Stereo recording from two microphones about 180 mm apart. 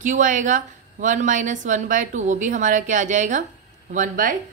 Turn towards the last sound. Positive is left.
turn(degrees=-45)  # may be behind; listen again after turning